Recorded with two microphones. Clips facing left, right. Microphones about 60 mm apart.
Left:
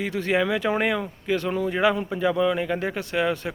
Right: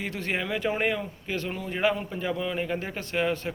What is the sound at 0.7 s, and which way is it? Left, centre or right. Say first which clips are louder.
Speech: left 3 dB; left.